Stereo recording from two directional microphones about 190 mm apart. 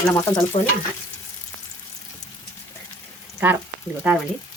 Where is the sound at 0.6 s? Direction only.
40° left (ahead or behind).